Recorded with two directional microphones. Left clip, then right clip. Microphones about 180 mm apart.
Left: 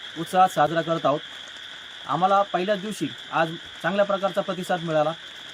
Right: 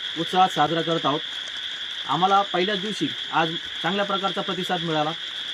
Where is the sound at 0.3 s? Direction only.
10° left (ahead or behind).